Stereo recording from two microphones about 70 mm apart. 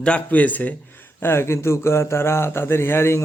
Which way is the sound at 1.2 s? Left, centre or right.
Left.